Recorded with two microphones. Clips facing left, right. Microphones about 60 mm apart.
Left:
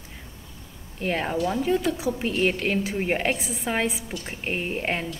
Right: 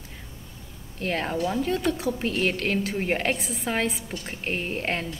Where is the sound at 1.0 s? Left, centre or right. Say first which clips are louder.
Left 1 dB; centre.